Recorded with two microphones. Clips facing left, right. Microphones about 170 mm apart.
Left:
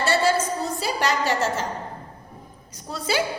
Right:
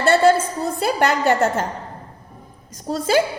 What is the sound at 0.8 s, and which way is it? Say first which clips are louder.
Speech: right 7 dB; 55° right (ahead or behind).